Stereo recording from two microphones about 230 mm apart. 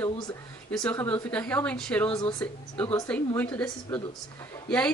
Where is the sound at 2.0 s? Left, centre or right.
Left.